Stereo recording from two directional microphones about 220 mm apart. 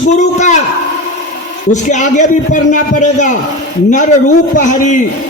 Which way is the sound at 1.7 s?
35° left (ahead or behind).